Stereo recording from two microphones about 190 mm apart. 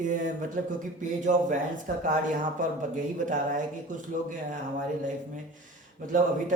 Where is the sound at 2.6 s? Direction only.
45° right (ahead or behind).